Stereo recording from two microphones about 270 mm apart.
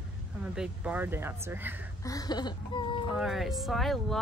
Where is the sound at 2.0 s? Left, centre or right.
Centre.